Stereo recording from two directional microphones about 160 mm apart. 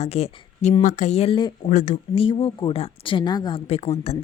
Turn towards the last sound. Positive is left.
turn(degrees=40)  # may be behind; listen again after turning